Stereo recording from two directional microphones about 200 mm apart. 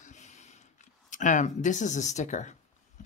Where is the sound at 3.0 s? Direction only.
35° left (ahead or behind).